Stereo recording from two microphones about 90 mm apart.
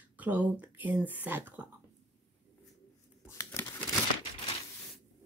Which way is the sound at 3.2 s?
35° left (ahead or behind).